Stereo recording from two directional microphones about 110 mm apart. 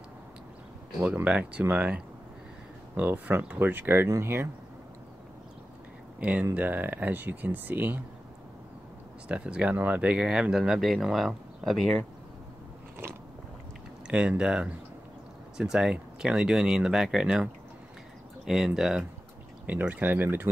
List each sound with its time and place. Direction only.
1.0 s speech: 15° right (ahead or behind)
3.0 s speech: 15° right (ahead or behind)
6.1 s speech: 10° right (ahead or behind)
9.3 s speech: 10° right (ahead or behind)
14.0 s speech: 10° right (ahead or behind)